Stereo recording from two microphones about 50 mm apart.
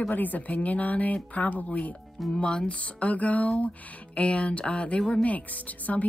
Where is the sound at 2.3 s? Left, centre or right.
Left.